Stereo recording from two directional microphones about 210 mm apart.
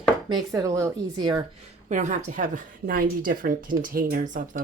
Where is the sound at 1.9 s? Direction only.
35° right (ahead or behind).